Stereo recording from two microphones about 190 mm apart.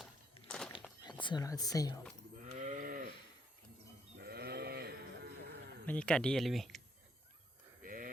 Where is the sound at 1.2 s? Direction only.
20° left (ahead or behind).